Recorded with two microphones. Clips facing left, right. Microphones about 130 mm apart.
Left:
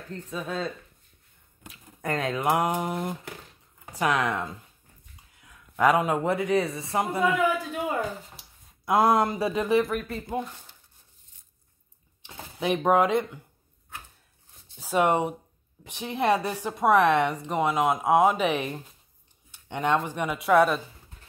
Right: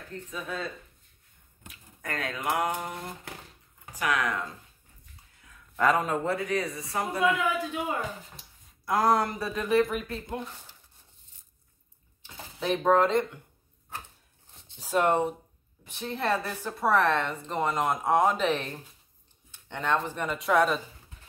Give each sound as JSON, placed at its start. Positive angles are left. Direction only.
{"t": 0.3, "sound": "speech", "side_deg": 30}
{"t": 2.0, "sound": "speech", "side_deg": 20}
{"t": 5.8, "sound": "a woman's voice", "side_deg": 10}
{"t": 6.2, "sound": "speech", "side_deg": 25}
{"t": 8.8, "sound": "speech", "side_deg": 20}
{"t": 9.8, "sound": "speech", "side_deg": 0}
{"t": 12.2, "sound": "speech", "side_deg": 15}
{"t": 14.9, "sound": "a woman's voice", "side_deg": 10}